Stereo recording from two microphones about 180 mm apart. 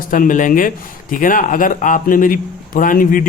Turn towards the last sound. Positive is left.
turn(degrees=50)  # may be behind; listen again after turning